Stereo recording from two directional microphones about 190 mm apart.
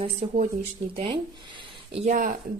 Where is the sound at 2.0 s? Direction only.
45° right (ahead or behind).